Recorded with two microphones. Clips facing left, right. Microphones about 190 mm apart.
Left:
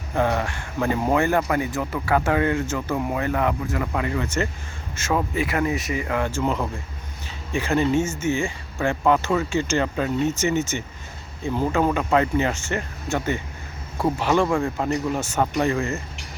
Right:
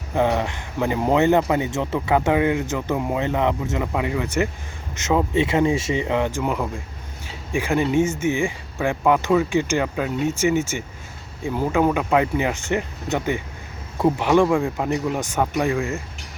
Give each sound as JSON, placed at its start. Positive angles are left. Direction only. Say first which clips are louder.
{"t": 0.1, "sound": "speech", "louder": "right 2 dB", "side_deg": -15}